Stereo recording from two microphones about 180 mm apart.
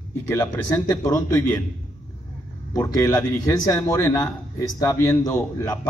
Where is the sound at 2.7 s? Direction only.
15° left (ahead or behind).